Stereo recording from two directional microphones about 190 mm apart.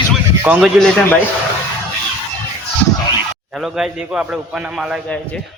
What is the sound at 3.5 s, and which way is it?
A man's voice, centre (ahead or behind).